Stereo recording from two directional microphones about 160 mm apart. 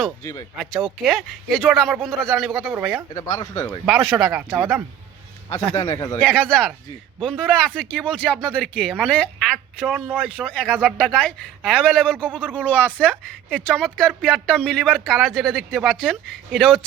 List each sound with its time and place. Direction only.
0.5 s speech: centre (ahead or behind)
3.2 s speech: 20° left (ahead or behind)
4.2 s speech: 10° right (ahead or behind)
5.7 s speech: 20° left (ahead or behind)
6.1 s speech: 5° left (ahead or behind)